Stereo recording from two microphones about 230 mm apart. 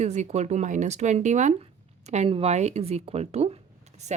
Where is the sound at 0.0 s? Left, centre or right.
Right.